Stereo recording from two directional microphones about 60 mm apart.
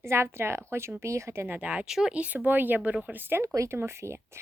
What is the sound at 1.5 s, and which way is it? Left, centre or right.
Speech, right.